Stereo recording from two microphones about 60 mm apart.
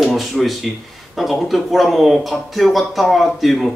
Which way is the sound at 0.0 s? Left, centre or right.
Centre.